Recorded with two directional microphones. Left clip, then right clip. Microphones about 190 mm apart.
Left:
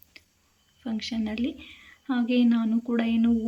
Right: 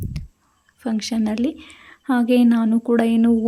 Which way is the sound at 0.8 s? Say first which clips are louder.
Right 8 dB; 65° right (ahead or behind).